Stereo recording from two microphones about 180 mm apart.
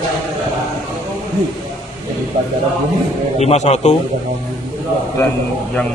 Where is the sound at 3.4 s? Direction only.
40° left (ahead or behind).